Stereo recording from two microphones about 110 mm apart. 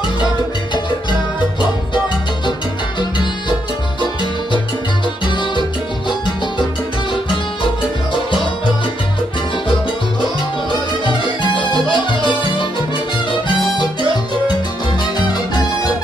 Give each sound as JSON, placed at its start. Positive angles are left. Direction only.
{"t": 5.2, "sound": "music", "side_deg": 45}
{"t": 11.5, "sound": "music", "side_deg": 50}
{"t": 15.1, "sound": "music", "side_deg": 40}